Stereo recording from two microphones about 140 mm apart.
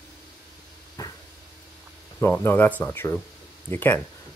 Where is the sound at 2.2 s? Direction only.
15° left (ahead or behind).